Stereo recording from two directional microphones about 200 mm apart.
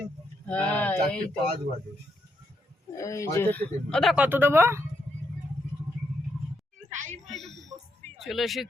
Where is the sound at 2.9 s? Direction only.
15° left (ahead or behind); by 4.8 s 10° right (ahead or behind).